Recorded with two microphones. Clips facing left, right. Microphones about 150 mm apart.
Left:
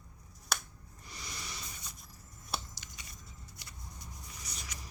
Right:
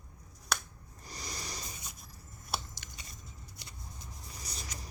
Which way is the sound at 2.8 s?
55° right (ahead or behind).